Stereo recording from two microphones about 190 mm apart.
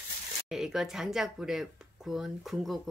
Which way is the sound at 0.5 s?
5° right (ahead or behind).